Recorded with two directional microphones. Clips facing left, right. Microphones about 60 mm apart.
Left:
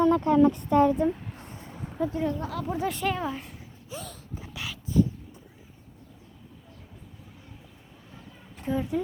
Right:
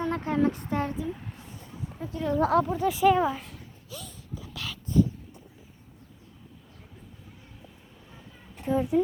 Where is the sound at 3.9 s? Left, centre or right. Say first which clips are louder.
Left 4 dB; left.